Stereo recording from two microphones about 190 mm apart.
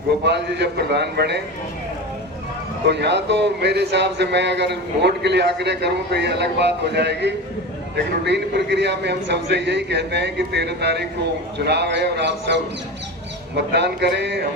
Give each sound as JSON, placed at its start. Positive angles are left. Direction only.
{"t": 0.3, "sound": "speech", "side_deg": -65}
{"t": 2.9, "sound": "speech", "side_deg": -65}
{"t": 13.6, "sound": "speech", "side_deg": -65}